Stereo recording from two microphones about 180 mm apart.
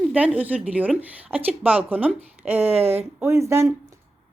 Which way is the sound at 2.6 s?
35° right (ahead or behind).